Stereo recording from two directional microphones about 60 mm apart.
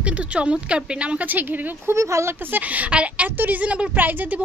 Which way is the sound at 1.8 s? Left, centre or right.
Right.